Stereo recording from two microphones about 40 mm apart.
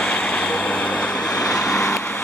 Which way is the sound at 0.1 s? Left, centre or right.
Left.